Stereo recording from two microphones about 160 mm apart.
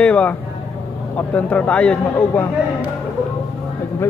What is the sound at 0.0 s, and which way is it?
Speech, 5° left (ahead or behind).